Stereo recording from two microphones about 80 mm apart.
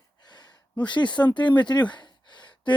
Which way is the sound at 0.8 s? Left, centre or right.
Left.